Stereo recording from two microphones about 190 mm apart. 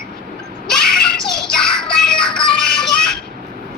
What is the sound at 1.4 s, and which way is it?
Music, 5° left (ahead or behind).